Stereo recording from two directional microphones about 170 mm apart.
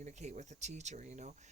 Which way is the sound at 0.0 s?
45° right (ahead or behind).